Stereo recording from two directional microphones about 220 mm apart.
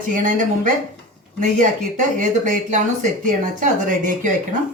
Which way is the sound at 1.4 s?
35° right (ahead or behind).